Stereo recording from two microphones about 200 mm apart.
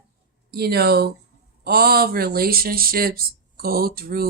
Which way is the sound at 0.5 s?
50° right (ahead or behind).